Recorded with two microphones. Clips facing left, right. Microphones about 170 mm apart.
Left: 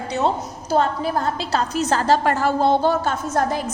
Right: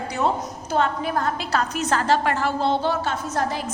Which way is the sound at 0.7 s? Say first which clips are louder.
Left 3 dB; 35° left (ahead or behind).